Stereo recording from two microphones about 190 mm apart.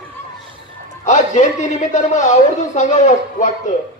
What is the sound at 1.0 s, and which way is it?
A man's voice, 40° left (ahead or behind).